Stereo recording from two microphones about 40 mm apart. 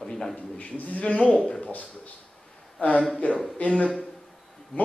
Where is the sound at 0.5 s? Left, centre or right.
Left.